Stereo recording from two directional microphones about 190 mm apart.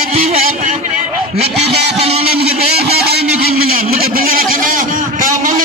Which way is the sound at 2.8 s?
60° right (ahead or behind).